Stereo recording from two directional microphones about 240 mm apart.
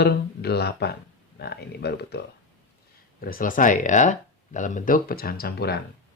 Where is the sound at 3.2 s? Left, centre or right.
Left.